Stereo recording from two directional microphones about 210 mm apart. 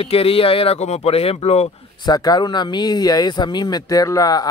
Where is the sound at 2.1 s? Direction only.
20° left (ahead or behind).